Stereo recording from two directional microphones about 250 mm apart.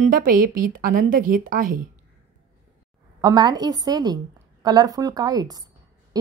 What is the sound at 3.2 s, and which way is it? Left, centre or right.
A woman's voice, centre.